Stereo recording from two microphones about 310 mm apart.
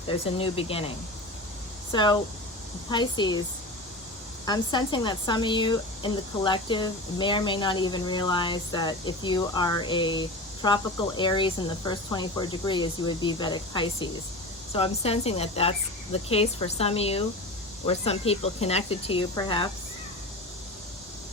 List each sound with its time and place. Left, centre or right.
0.1 s speech: centre
4.4 s speech: centre